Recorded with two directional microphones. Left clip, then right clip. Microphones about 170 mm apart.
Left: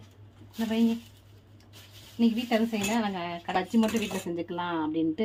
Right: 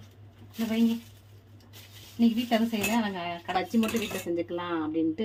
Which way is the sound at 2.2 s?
30° left (ahead or behind).